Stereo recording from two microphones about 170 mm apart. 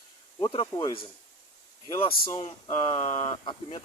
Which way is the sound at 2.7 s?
35° left (ahead or behind).